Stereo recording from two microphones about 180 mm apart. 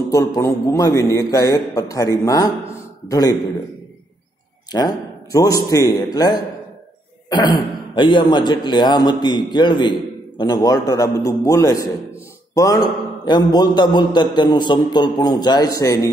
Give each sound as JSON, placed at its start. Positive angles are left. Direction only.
{"t": 0.1, "sound": "a man's voice", "side_deg": 20}
{"t": 4.7, "sound": "a man's voice", "side_deg": 20}